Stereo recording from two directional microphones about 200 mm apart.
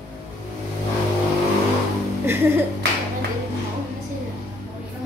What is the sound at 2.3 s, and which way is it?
Speech, 10° right (ahead or behind).